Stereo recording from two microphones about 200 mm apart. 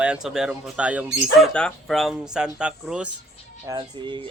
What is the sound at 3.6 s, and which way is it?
Speech, 20° right (ahead or behind).